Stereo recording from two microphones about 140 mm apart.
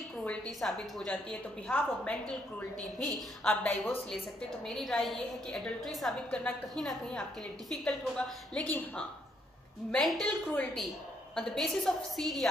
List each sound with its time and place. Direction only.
0.2 s a woman's voice: 10° left (ahead or behind)
3.4 s a woman's voice: 10° left (ahead or behind)